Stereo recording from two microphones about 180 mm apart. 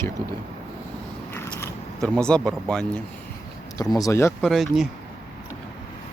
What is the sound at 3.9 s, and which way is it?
Speech, 15° left (ahead or behind).